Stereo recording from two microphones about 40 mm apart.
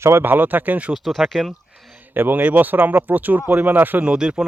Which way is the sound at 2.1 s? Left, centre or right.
Right.